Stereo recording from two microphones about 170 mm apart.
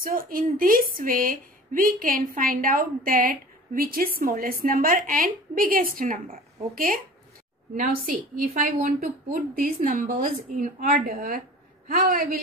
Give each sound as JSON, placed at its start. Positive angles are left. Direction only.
{"t": 0.0, "sound": "a woman's voice", "side_deg": -55}